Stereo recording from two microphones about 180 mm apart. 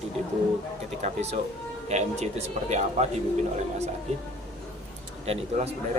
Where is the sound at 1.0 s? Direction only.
35° right (ahead or behind).